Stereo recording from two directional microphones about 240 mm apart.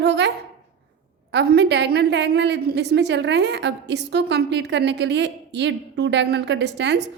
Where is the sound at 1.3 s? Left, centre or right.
Right.